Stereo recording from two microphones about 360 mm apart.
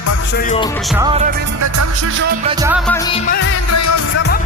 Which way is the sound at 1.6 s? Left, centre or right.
Right.